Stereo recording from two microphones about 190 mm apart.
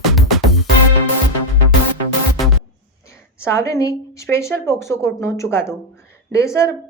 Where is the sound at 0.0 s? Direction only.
Centre (ahead or behind).